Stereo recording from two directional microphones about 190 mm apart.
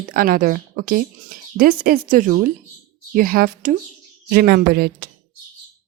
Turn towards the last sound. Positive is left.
turn(degrees=-55)  # may be behind; listen again after turning